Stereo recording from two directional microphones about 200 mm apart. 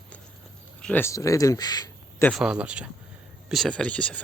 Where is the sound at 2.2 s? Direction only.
Centre (ahead or behind).